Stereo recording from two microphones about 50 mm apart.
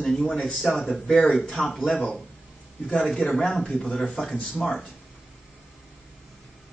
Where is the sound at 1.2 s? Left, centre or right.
Left.